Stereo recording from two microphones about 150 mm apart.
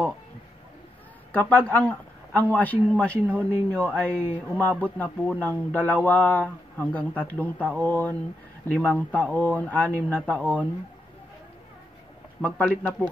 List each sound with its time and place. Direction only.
1.3 s speech: 10° left (ahead or behind)
12.4 s speech: 10° left (ahead or behind)